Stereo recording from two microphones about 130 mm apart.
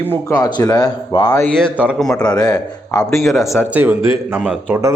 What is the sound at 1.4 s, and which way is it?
Speech, 5° left (ahead or behind).